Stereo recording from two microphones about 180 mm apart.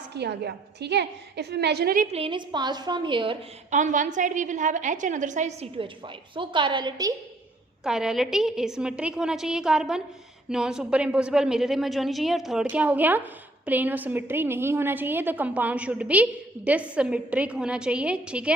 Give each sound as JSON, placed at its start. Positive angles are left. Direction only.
{"t": 0.1, "sound": "a woman's voice", "side_deg": -65}
{"t": 2.0, "sound": "a woman's voice", "side_deg": -35}
{"t": 3.7, "sound": "a woman's voice", "side_deg": -45}
{"t": 7.9, "sound": "a woman's voice", "side_deg": -5}